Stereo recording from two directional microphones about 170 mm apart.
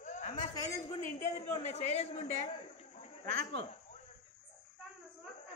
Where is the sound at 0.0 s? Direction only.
45° left (ahead or behind).